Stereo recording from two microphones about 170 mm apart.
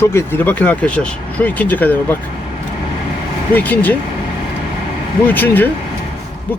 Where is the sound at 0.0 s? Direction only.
15° left (ahead or behind).